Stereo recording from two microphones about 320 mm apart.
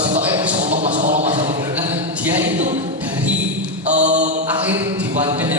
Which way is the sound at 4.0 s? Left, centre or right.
Right.